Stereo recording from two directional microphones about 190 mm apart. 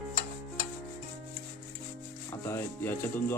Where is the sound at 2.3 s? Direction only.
15° left (ahead or behind).